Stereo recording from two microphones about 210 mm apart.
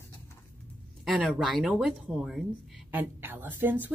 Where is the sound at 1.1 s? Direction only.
Centre (ahead or behind).